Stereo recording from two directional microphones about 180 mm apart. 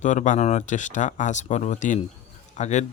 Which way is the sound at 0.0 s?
45° left (ahead or behind).